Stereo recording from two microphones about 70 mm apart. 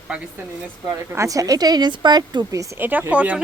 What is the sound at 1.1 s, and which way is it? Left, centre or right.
Speech, right.